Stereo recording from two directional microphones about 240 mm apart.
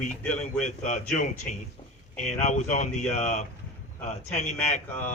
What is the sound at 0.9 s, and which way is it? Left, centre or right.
A man's voice, left.